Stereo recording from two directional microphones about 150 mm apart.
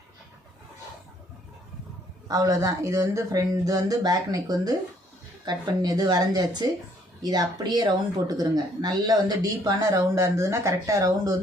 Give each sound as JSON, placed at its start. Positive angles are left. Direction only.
{"t": 2.2, "sound": "speech", "side_deg": -25}